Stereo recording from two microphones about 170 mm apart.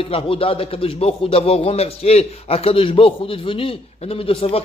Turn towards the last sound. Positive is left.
turn(degrees=35)  # may be behind; listen again after turning